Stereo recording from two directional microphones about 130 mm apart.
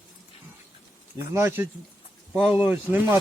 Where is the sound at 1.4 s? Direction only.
20° right (ahead or behind).